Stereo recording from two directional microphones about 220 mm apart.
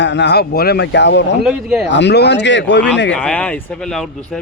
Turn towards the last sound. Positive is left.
turn(degrees=0)  # may be behind; listen again after turning